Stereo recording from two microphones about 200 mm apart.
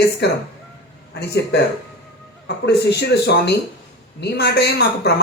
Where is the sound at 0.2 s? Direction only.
55° left (ahead or behind).